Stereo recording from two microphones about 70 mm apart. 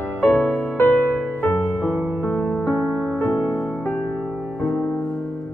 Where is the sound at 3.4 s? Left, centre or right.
Centre.